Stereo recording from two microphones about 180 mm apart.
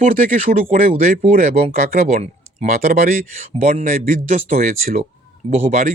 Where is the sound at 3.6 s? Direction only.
40° right (ahead or behind).